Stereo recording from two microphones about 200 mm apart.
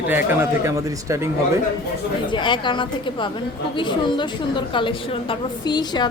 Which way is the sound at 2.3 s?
25° left (ahead or behind).